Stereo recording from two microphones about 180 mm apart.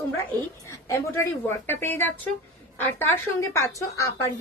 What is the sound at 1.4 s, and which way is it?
A woman's voice, 10° left (ahead or behind).